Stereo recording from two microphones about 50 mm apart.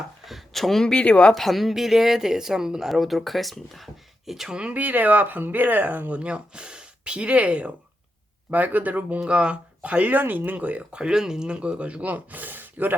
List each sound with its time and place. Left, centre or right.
0.3 s a sound: centre
0.9 s speech: left
1.4 s speech: centre
4.7 s speech: right
8.4 s speech: right
9.2 s speech: right
10.9 s speech: centre; by 13.0 s right